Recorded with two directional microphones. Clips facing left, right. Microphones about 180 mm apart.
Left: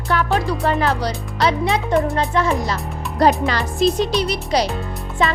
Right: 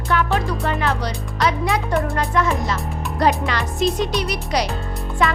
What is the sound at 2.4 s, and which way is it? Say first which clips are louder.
Speech: left 1 dB; 35° left (ahead or behind).